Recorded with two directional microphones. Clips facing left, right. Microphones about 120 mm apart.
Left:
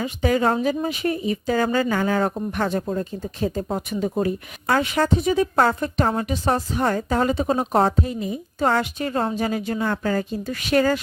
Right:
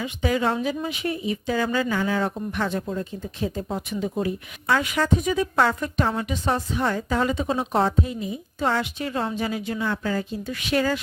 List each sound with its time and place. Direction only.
0.0 s a woman's voice: 45° left (ahead or behind)
4.8 s a woman's voice: 30° left (ahead or behind)